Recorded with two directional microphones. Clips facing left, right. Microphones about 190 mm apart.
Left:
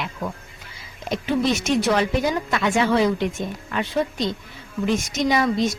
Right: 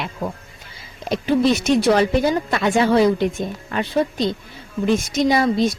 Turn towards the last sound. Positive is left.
turn(degrees=-35)  # may be behind; listen again after turning